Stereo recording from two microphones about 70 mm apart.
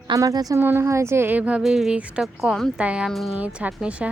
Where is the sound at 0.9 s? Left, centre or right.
Right.